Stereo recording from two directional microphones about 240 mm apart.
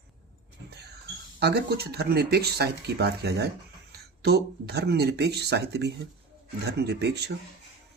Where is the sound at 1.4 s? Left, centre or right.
Right.